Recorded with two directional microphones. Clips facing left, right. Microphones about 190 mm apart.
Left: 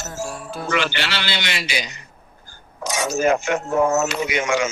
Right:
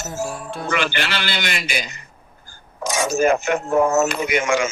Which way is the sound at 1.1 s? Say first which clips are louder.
Right 1 dB; 50° right (ahead or behind).